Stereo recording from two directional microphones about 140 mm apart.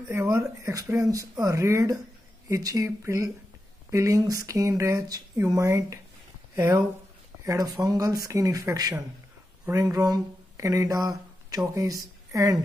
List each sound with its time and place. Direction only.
0.1 s speech: 15° right (ahead or behind)